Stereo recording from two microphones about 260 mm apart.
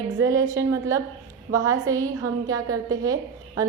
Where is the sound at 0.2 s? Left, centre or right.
Centre.